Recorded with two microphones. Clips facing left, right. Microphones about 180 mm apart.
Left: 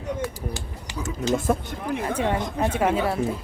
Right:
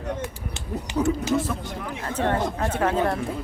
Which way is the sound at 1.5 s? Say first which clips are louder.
Left 8 dB; 50° left (ahead or behind).